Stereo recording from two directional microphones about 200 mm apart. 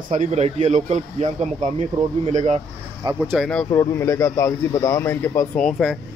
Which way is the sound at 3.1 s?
Centre (ahead or behind).